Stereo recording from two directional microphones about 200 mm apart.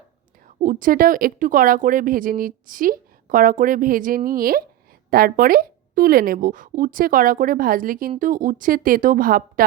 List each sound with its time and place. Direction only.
0.4 s a woman's voice: 40° right (ahead or behind)